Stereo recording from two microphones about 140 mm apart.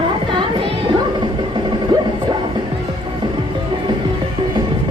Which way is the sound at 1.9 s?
30° right (ahead or behind).